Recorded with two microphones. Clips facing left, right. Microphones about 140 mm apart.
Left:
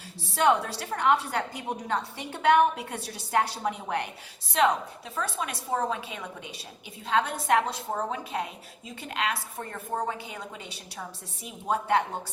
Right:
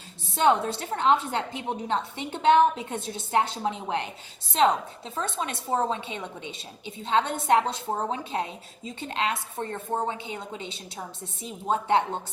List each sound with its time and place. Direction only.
0.3 s a woman's voice: 25° right (ahead or behind)